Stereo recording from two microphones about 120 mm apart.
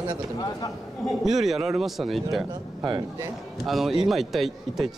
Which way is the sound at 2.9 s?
35° right (ahead or behind).